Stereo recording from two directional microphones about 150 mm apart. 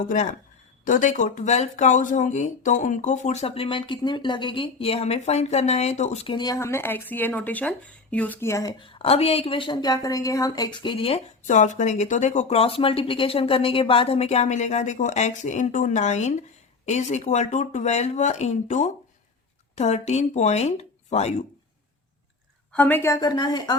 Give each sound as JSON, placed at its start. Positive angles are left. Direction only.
{"t": 0.9, "sound": "speech", "side_deg": 60}
{"t": 8.8, "sound": "a woman's voice", "side_deg": 40}
{"t": 11.4, "sound": "speech", "side_deg": 55}
{"t": 22.7, "sound": "a woman's voice", "side_deg": 10}